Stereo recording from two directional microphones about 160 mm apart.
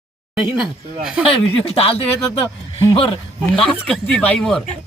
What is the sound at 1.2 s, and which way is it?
Speech, 35° left (ahead or behind).